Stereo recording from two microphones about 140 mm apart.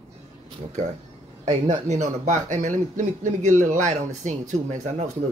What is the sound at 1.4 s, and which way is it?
Speech, 55° right (ahead or behind).